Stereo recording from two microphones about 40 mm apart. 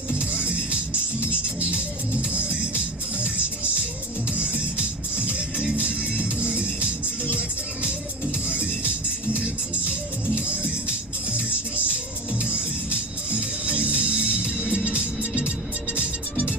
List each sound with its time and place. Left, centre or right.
0.1 s music: right
2.2 s music: right
10.3 s music: right
13.3 s music: right